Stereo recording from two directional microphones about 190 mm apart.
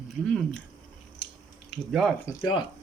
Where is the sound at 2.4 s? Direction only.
25° left (ahead or behind).